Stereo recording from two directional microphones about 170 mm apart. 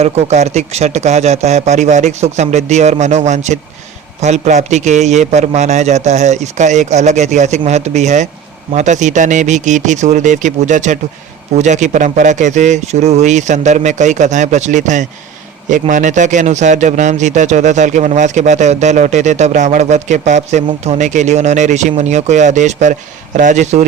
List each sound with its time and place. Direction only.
0.0 s a man's voice: 40° right (ahead or behind)